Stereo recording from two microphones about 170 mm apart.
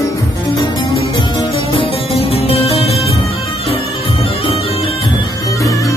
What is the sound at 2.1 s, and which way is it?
Music, 35° left (ahead or behind).